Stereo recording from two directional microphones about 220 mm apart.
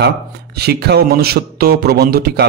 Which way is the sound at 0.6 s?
50° right (ahead or behind).